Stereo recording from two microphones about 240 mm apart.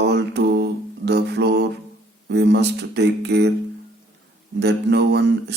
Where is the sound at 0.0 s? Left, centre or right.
Right.